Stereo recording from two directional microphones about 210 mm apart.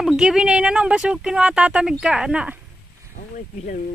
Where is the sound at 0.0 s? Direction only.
Centre (ahead or behind).